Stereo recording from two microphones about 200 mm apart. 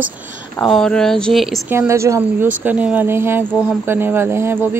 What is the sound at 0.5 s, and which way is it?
Speech, centre (ahead or behind).